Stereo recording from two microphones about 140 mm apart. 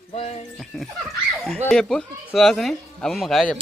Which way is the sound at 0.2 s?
50° left (ahead or behind).